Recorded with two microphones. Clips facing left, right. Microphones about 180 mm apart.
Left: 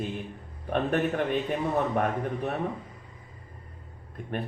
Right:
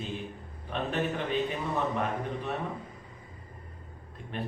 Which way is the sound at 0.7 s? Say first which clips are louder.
Left 5 dB; 50° left (ahead or behind).